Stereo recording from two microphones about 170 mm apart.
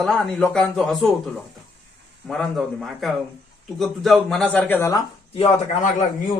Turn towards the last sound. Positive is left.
turn(degrees=50)  # may be behind; listen again after turning